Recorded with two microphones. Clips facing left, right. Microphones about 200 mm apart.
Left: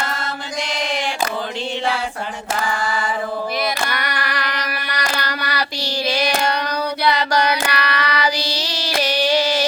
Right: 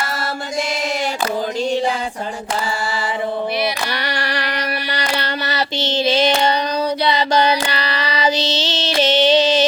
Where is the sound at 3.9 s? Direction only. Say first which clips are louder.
Right 2 dB; 30° right (ahead or behind).